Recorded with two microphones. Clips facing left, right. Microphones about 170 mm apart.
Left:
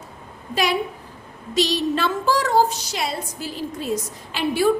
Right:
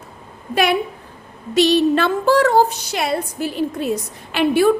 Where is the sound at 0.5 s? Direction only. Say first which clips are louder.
Right 4 dB; 60° right (ahead or behind).